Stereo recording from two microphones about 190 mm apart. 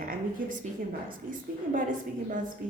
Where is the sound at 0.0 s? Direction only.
45° right (ahead or behind).